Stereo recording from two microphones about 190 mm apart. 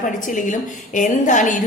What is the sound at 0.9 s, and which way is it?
Speech, 40° left (ahead or behind).